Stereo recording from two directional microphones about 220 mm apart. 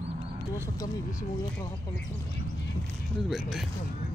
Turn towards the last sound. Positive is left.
turn(degrees=0)  # may be behind; listen again after turning